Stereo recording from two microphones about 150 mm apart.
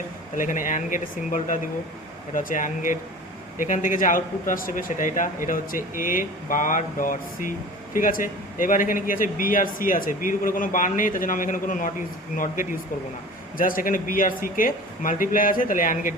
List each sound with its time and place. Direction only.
0.3 s speech: 60° left (ahead or behind)